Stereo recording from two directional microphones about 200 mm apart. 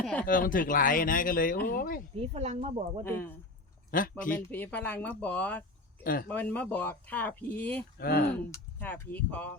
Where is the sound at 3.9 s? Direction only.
40° left (ahead or behind).